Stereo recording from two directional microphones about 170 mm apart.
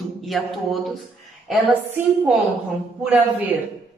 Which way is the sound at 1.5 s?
10° right (ahead or behind).